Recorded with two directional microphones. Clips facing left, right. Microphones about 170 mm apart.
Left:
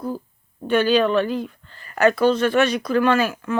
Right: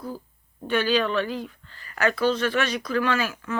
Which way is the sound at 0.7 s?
50° left (ahead or behind).